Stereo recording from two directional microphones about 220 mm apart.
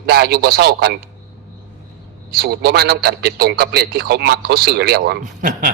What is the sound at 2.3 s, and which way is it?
A man's voice, 45° right (ahead or behind).